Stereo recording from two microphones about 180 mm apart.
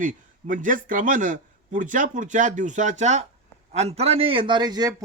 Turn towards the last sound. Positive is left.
turn(degrees=-20)  # may be behind; listen again after turning